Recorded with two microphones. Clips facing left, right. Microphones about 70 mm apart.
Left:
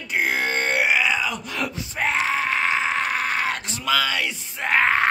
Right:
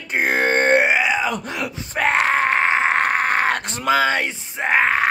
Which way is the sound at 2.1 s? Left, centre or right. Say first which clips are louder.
Right 6 dB; right.